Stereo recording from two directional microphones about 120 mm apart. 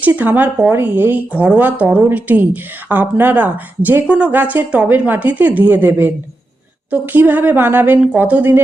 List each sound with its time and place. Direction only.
0.0 s speech: 15° right (ahead or behind)